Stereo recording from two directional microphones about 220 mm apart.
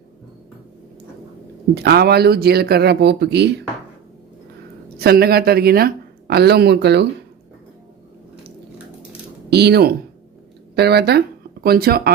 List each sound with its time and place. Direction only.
1.7 s speech: 45° right (ahead or behind)
4.9 s speech: 45° right (ahead or behind)
9.5 s speech: 50° right (ahead or behind)